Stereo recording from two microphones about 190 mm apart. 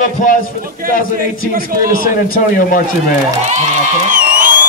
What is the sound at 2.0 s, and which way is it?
Speech, 50° left (ahead or behind).